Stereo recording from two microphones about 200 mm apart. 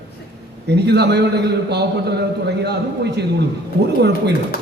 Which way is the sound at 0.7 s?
55° right (ahead or behind).